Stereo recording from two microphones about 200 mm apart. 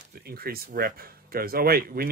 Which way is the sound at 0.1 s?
50° right (ahead or behind).